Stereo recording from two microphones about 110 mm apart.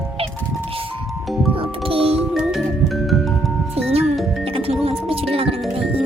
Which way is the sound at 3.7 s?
65° right (ahead or behind).